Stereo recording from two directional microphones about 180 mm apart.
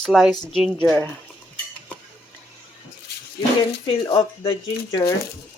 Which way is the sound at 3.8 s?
30° left (ahead or behind).